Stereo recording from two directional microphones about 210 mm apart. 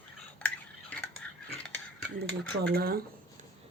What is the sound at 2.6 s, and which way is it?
Speech, 45° right (ahead or behind).